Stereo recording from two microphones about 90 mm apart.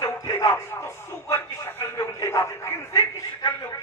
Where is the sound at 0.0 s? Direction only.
35° left (ahead or behind).